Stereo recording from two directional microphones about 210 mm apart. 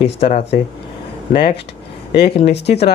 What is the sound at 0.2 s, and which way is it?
Speech, 30° left (ahead or behind).